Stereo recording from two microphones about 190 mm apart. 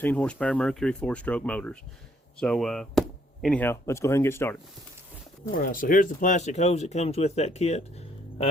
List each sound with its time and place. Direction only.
0.0 s speech: 5° left (ahead or behind)
5.5 s speech: 45° left (ahead or behind)